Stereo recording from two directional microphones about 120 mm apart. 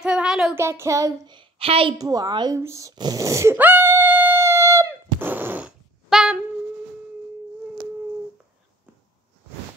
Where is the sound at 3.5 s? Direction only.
15° right (ahead or behind).